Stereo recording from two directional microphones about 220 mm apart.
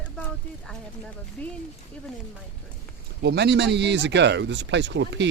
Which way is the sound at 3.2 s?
50° right (ahead or behind).